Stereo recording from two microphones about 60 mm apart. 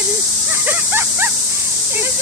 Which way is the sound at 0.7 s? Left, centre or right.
Right.